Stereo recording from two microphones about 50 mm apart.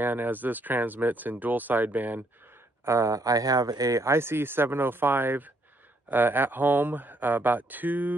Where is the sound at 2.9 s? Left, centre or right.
Right.